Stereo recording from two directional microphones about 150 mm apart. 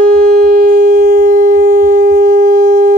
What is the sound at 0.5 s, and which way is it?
Shofar, 60° right (ahead or behind).